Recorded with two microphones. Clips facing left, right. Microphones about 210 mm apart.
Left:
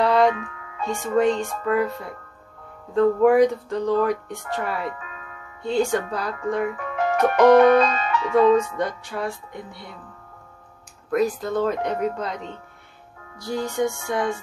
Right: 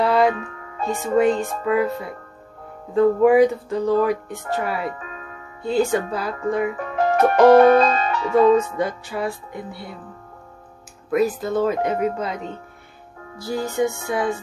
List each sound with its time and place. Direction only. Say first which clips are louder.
0.0 s music: even; 5° right (ahead or behind)
0.3 s music: right 1 dB; 40° right (ahead or behind)
1.2 s speech: right 2 dB; 5° right (ahead or behind)
4.8 s music: right 3 dB; 40° right (ahead or behind)
5.6 s speech: right 2 dB; 5° right (ahead or behind)
6.8 s speech: right 3 dB; 40° right (ahead or behind)
8.7 s speech: right 2 dB; 5° right (ahead or behind)
11.1 s speech: right 2 dB; 5° right (ahead or behind)
13.4 s speech: right 2 dB; 5° right (ahead or behind)